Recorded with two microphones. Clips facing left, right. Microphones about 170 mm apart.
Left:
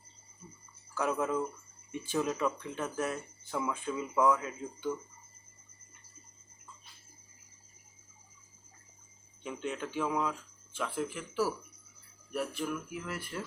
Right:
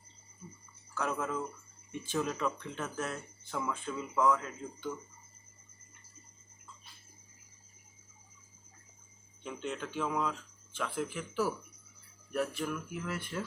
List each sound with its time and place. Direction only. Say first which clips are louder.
0.9 s speech: left 4 dB; 5° left (ahead or behind)
9.4 s speech: left 2 dB; 5° left (ahead or behind)